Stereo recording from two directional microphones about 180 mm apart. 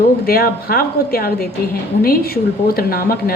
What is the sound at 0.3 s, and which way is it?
Speech, 55° left (ahead or behind).